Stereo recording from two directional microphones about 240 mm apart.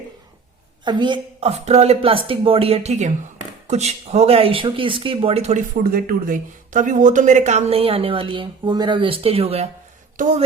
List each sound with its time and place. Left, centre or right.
0.9 s speech: centre